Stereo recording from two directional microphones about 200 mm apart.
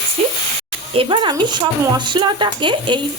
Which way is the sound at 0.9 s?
25° right (ahead or behind).